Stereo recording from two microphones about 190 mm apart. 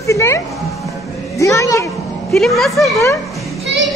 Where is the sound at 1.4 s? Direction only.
15° left (ahead or behind).